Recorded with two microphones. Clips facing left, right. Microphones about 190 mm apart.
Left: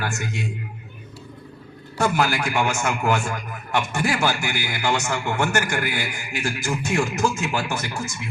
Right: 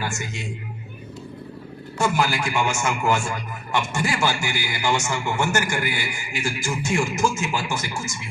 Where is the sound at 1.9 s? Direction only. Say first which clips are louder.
Left 1 dB; 60° left (ahead or behind).